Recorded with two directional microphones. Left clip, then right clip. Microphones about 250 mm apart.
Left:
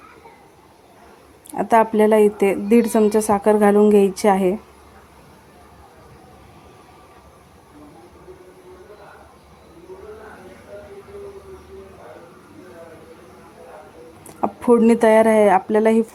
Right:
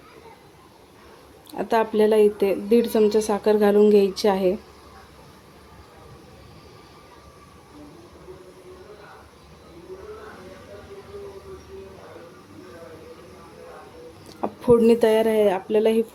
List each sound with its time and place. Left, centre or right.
1.5 s a woman's voice: left
14.4 s speech: centre